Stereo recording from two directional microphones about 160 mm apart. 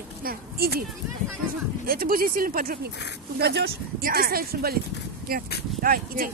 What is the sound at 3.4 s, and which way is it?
Speech, 90° right.